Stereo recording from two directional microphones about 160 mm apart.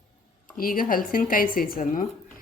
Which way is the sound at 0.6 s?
60° left (ahead or behind).